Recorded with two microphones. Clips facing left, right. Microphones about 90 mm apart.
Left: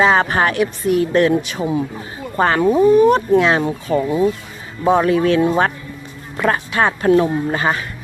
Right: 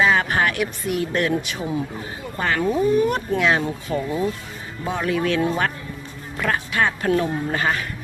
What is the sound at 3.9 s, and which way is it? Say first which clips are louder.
Speech: left 7 dB; 55° left (ahead or behind).